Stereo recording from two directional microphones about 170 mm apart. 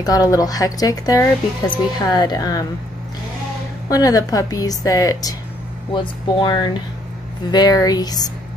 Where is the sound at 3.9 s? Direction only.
20° left (ahead or behind).